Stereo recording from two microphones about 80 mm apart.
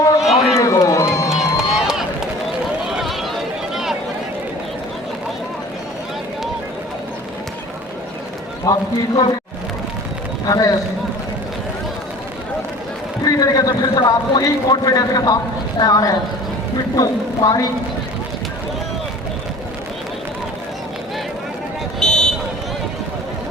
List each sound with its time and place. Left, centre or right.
0.5 s crowd: left
1.3 s run: centre
8.6 s a man's voice: left
10.4 s a man's voice: left
13.2 s a sound: left
14.4 s a man's voice: left
22.0 s vehicle: centre